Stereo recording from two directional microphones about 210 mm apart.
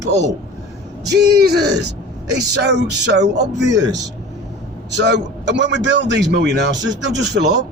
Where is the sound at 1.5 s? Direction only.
50° right (ahead or behind).